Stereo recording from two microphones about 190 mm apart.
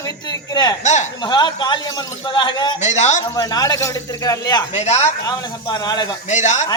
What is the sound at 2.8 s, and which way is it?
Speech, 40° left (ahead or behind).